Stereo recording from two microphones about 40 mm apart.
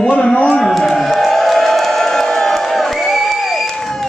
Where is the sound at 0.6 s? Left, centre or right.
Centre.